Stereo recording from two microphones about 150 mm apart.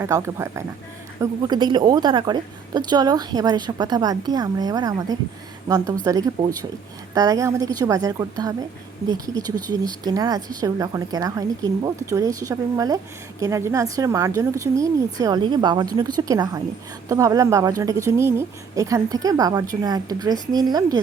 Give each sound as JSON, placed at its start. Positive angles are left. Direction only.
{"t": 0.0, "sound": "a woman's voice", "side_deg": -20}